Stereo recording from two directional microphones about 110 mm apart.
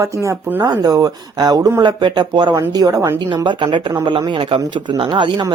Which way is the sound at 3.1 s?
45° right (ahead or behind).